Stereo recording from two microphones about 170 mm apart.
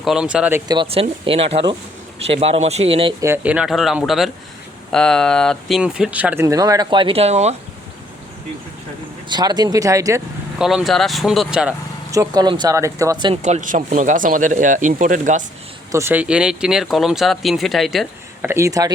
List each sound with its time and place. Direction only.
0.0 s speech: 5° right (ahead or behind)
0.7 s speech: 30° right (ahead or behind)
3.2 s speech: 15° right (ahead or behind); by 7.5 s 40° right (ahead or behind)
9.3 s speech: 25° right (ahead or behind)
10.6 s speech: centre (ahead or behind)
12.1 s speech: 20° right (ahead or behind)
13.4 s speech: 45° right (ahead or behind)
15.9 s speech: 15° right (ahead or behind)
18.4 s speech: 15° right (ahead or behind)